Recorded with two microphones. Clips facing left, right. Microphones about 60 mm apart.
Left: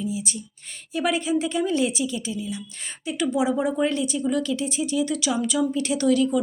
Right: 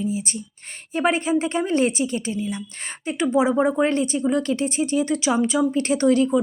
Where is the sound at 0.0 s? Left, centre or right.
Right.